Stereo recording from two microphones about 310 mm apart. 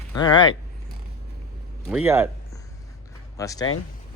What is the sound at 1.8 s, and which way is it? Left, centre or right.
Speech, centre.